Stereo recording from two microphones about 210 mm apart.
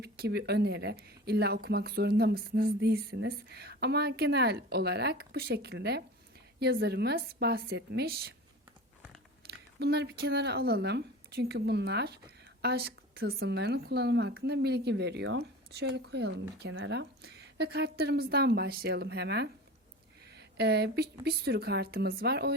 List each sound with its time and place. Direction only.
0.0 s speech: 50° right (ahead or behind)
9.7 s speech: 50° right (ahead or behind)
20.6 s speech: 50° right (ahead or behind)